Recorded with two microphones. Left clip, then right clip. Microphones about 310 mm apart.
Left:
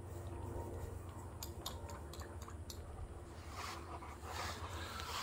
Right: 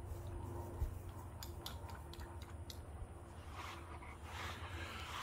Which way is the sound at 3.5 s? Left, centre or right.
Left.